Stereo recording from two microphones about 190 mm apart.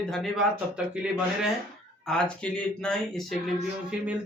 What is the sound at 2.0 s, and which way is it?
Speech, 5° left (ahead or behind).